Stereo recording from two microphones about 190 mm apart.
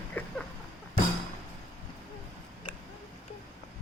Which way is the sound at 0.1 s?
10° left (ahead or behind).